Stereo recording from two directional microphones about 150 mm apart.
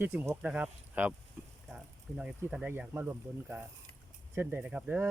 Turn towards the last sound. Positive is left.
turn(degrees=-10)  # may be behind; listen again after turning